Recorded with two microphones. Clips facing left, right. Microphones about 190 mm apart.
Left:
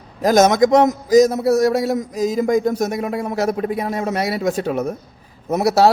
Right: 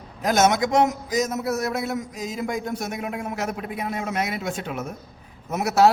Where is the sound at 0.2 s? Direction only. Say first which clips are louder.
Left 7 dB; 40° left (ahead or behind).